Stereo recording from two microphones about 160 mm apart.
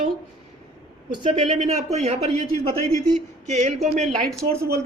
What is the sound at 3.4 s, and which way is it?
Speech, 45° right (ahead or behind).